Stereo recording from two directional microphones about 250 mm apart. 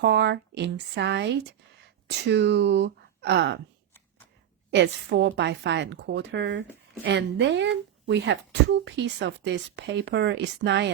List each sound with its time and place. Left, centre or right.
0.0 s speech: right
4.7 s speech: right